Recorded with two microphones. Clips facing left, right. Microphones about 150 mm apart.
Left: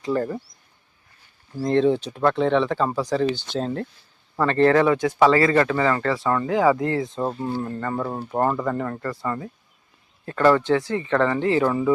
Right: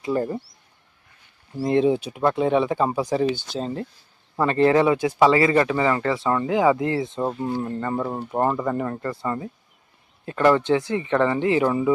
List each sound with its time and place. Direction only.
0.0 s speech: 15° right (ahead or behind)
1.5 s speech: 10° right (ahead or behind)
3.5 s speech: centre (ahead or behind)
4.4 s speech: 10° right (ahead or behind)
7.2 s speech: 5° right (ahead or behind)
7.6 s speech: 20° right (ahead or behind)